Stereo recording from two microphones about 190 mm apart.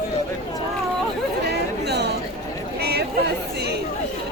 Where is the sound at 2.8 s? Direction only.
60° right (ahead or behind).